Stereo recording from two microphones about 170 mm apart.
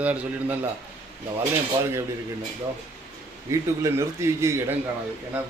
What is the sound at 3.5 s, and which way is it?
A man's voice, 15° right (ahead or behind).